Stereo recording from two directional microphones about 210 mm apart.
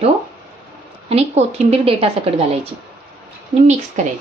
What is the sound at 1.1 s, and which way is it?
A woman's voice, 30° right (ahead or behind).